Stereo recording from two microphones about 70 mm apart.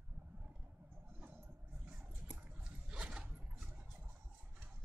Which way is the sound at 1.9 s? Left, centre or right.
Centre.